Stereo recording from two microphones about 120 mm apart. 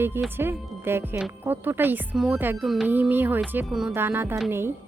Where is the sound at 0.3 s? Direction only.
20° right (ahead or behind).